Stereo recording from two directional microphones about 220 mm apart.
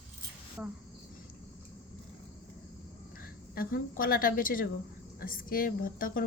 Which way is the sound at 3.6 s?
40° left (ahead or behind).